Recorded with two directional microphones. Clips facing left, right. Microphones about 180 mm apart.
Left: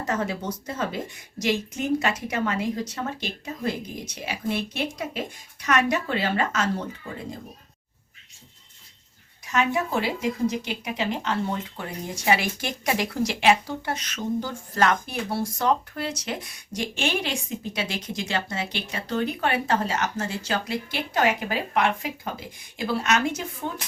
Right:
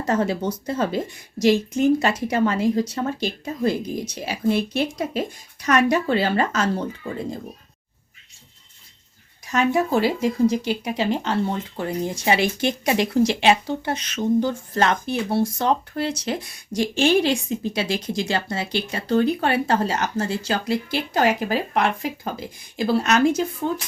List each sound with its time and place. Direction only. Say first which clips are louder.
0.1 s speech: right 7 dB; 30° right (ahead or behind)
9.5 s speech: right 5 dB; 35° right (ahead or behind)